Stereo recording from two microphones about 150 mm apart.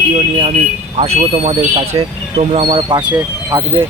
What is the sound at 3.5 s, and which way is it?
Speech, 20° right (ahead or behind).